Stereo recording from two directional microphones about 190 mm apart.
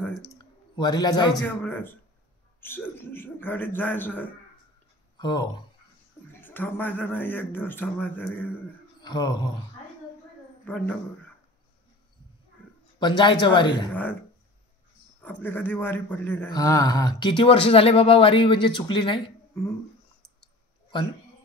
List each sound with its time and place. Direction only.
0.3 s a sound: 20° left (ahead or behind)
1.3 s a man's voice: 10° left (ahead or behind)
5.1 s speech: 20° left (ahead or behind)
6.4 s a man's voice: 10° left (ahead or behind)
9.0 s a man's voice: 20° left (ahead or behind)
10.7 s a man's voice: 10° left (ahead or behind)
13.0 s a man's voice: 25° left (ahead or behind)
15.2 s a man's voice: 10° left (ahead or behind); by 19.3 s 25° left (ahead or behind)